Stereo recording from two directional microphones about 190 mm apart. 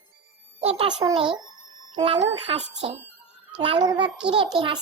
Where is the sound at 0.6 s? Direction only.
30° right (ahead or behind).